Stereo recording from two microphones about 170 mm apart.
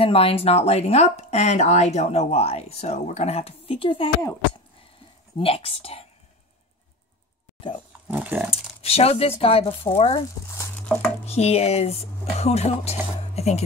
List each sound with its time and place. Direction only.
0.0 s speech: 35° left (ahead or behind)
5.4 s speech: 35° left (ahead or behind)
8.1 s speech: 10° right (ahead or behind)
8.5 s speech: 35° left (ahead or behind)
11.2 s speech: 40° left (ahead or behind)